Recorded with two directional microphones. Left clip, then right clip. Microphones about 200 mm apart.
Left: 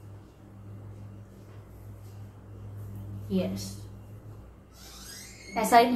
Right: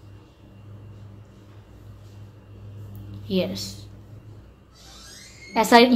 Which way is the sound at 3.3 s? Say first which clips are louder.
Right 7 dB; 45° right (ahead or behind).